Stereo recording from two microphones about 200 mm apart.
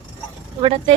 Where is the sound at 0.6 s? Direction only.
25° right (ahead or behind).